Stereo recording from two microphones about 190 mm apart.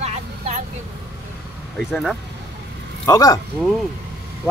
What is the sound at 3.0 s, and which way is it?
Speech, 20° left (ahead or behind).